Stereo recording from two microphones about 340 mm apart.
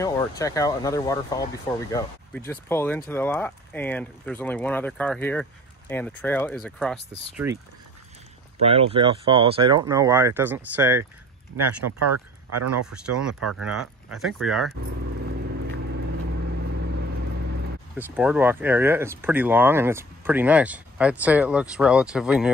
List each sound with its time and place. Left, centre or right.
0.0 s speech: centre
11.5 s speech: right
13.6 s speech: centre
17.9 s speech: centre